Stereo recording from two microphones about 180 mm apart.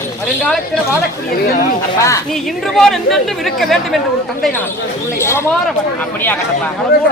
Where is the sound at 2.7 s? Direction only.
Centre (ahead or behind).